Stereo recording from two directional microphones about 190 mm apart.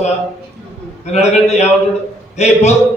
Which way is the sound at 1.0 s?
35° left (ahead or behind).